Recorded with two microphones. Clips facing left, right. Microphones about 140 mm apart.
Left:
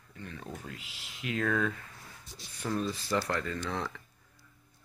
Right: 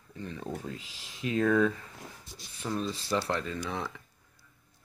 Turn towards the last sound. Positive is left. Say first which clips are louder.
# even
turn(degrees=-15)  # may be behind; listen again after turning